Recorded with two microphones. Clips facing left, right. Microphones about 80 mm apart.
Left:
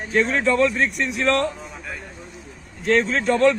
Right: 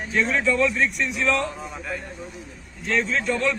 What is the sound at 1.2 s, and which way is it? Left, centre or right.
Speech, left.